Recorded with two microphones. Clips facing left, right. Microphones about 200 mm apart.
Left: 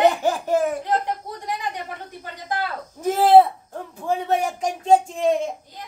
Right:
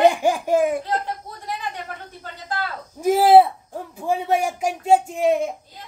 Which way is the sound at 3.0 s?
10° right (ahead or behind).